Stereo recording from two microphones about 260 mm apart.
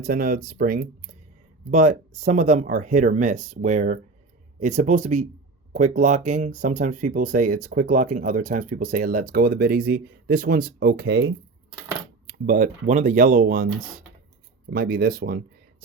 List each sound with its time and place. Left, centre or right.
0.0 s speech: right
12.3 s speech: right
14.7 s speech: right